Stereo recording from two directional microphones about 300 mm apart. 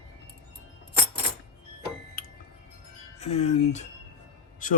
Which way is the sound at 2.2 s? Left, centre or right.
Left.